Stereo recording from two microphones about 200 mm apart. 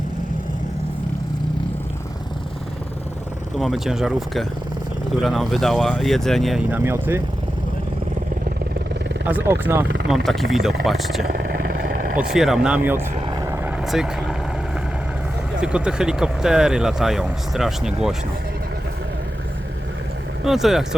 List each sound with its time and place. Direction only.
3.6 s speech: centre (ahead or behind)
9.2 s speech: 10° right (ahead or behind)
11.3 s vehicle: 45° right (ahead or behind)
12.2 s speech: centre (ahead or behind)
13.4 s vehicle: 15° right (ahead or behind)
13.8 s speech: centre (ahead or behind)
15.5 s speech: 5° right (ahead or behind)
20.4 s speech: centre (ahead or behind)